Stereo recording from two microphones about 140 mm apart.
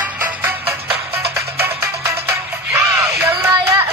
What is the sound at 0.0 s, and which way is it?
Music, 10° right (ahead or behind).